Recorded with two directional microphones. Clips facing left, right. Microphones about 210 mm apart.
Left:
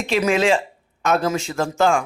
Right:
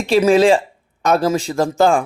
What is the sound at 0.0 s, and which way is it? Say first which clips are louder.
A man's voice: right 6 dB; 35° right (ahead or behind).